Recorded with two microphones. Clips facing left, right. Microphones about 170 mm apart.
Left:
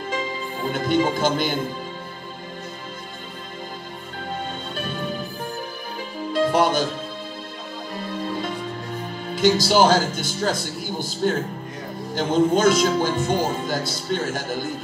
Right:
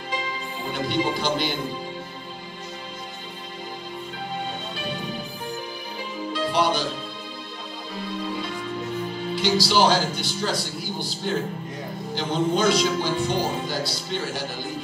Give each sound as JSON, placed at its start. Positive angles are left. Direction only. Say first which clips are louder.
{"t": 0.7, "sound": "speech", "louder": "left 4 dB", "side_deg": 45}
{"t": 6.3, "sound": "music", "louder": "left 4 dB", "side_deg": 45}
{"t": 9.3, "sound": "speech", "louder": "left 4 dB", "side_deg": 45}